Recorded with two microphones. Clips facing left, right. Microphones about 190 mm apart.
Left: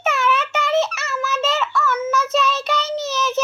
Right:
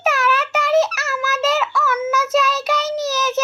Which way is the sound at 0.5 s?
Centre (ahead or behind).